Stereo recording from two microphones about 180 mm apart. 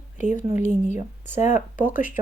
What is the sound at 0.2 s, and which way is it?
A woman's voice, 40° left (ahead or behind).